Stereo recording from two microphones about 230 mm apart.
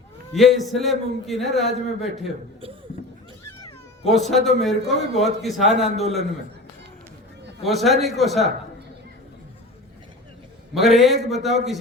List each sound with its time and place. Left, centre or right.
0.3 s a man's voice: centre
4.0 s a man's voice: centre
7.6 s a man's voice: centre
10.8 s a man's voice: centre